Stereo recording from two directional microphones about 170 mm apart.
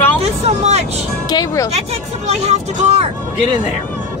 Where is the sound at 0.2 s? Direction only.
40° right (ahead or behind).